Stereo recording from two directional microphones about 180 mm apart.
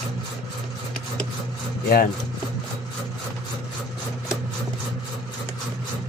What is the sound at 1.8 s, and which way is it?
Speech, 55° left (ahead or behind).